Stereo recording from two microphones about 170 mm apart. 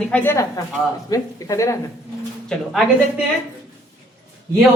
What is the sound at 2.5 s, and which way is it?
Speech, 5° left (ahead or behind).